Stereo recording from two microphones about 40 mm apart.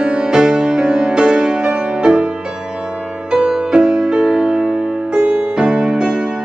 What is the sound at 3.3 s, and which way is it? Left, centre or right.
Music, centre.